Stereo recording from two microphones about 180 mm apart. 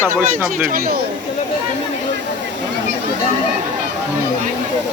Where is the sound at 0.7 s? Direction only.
55° right (ahead or behind).